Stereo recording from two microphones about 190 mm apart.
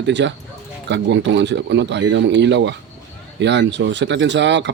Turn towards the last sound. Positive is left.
turn(degrees=-65)  # may be behind; listen again after turning